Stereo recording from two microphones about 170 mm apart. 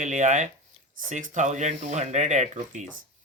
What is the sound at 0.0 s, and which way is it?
Speech, 45° right (ahead or behind).